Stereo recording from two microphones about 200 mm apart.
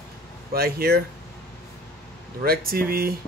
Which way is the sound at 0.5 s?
50° right (ahead or behind).